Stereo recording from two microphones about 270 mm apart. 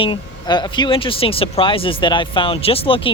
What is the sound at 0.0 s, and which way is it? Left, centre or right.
Speech, centre.